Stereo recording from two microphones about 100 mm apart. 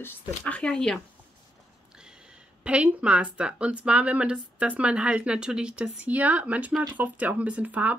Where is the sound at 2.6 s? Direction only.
10° right (ahead or behind).